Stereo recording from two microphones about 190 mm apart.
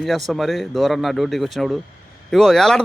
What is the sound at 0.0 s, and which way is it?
Speech, centre (ahead or behind).